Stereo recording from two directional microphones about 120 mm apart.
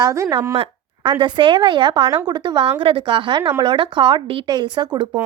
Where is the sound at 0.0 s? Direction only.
30° right (ahead or behind).